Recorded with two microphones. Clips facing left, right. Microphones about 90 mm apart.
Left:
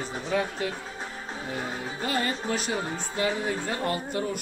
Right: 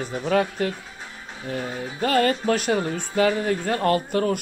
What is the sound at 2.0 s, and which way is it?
Speech, 60° right (ahead or behind).